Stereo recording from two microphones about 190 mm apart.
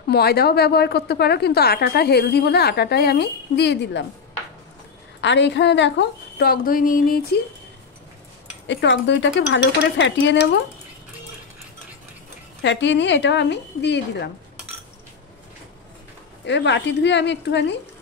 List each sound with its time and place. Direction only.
0.1 s a woman's voice: 55° left (ahead or behind)
5.2 s a woman's voice: 70° left (ahead or behind); by 7.2 s 45° left (ahead or behind)
8.6 s dishes: 75° left (ahead or behind)
12.6 s dishes: 70° left (ahead or behind)
16.4 s dishes: 70° left (ahead or behind)